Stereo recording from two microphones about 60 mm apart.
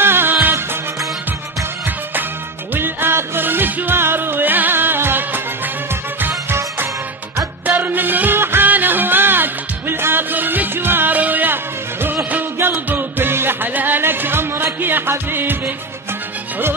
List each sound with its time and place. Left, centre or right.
0.0 s music: right
2.7 s music: right
7.6 s music: right